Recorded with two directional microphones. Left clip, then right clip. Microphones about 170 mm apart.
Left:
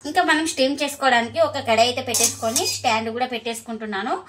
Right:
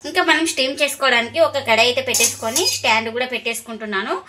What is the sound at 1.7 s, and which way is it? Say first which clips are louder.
A woman's voice: right 3 dB; 40° right (ahead or behind).